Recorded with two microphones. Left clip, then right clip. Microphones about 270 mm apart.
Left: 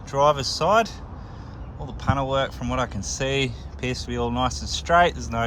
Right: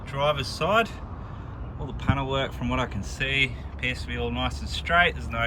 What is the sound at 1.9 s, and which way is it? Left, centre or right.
Speech, centre.